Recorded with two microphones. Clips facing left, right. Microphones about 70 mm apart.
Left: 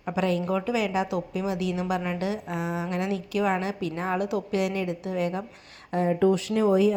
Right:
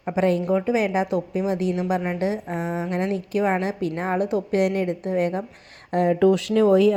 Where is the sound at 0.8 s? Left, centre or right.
Right.